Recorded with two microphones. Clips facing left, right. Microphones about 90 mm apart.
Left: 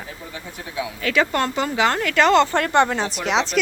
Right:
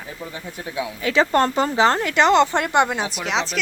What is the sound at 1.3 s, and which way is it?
Speech, 35° right (ahead or behind).